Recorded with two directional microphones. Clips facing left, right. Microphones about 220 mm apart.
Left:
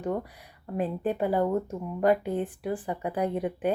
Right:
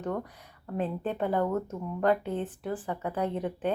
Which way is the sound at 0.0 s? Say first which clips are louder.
Left 2 dB; 10° left (ahead or behind).